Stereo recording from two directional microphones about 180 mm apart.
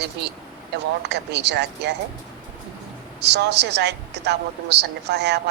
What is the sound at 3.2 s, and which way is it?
A woman's voice, 70° right (ahead or behind).